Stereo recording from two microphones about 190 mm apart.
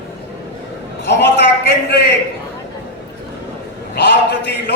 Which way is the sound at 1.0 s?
60° left (ahead or behind).